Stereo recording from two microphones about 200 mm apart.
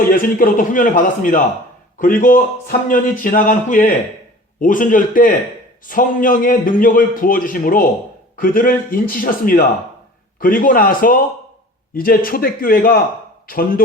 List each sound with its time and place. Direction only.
0.1 s a man's voice: 45° left (ahead or behind)